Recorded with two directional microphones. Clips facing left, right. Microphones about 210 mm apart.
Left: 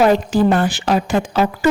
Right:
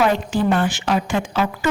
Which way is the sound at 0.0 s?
40° left (ahead or behind).